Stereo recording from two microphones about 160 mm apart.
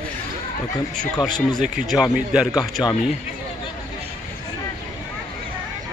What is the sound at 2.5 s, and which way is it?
Speech, 25° left (ahead or behind).